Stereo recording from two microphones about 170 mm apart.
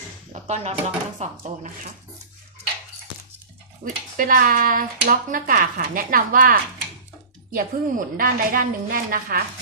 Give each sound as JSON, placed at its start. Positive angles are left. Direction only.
{"t": 0.3, "sound": "speech", "side_deg": -40}
{"t": 1.2, "sound": "speech", "side_deg": -50}
{"t": 3.8, "sound": "speech", "side_deg": -45}